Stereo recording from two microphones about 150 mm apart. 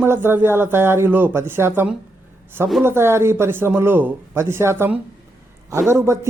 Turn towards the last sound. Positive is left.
turn(degrees=-20)  # may be behind; listen again after turning